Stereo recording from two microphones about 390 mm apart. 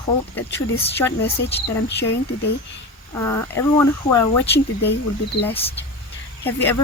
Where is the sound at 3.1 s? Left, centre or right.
Centre.